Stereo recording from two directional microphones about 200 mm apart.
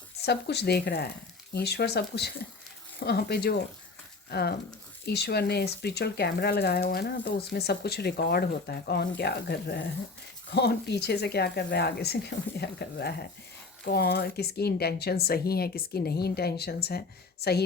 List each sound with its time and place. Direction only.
0.3 s speech: 55° left (ahead or behind)